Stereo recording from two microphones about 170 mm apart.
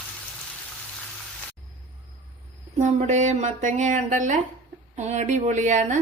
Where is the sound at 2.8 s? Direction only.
45° right (ahead or behind).